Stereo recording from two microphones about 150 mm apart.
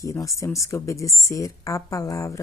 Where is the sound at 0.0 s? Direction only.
20° left (ahead or behind).